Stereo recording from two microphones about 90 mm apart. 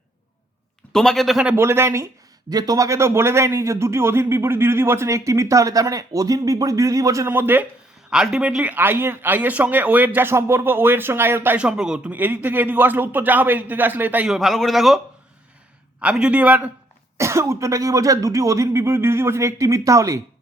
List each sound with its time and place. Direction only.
0.9 s a man's voice: 5° left (ahead or behind)
1.5 s speech: 30° right (ahead or behind)
2.5 s a man's voice: 45° right (ahead or behind)
7.3 s speech: 25° right (ahead or behind)
8.1 s speech: 10° right (ahead or behind)
11.6 s a man's voice: 10° right (ahead or behind)
12.1 s speech: 20° right (ahead or behind)
14.3 s a man's voice: centre (ahead or behind)
16.0 s a man's voice: 10° right (ahead or behind)
17.2 s a man's voice: 30° right (ahead or behind)